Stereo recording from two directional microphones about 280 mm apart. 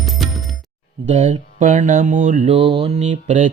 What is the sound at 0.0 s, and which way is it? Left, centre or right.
Coin, centre.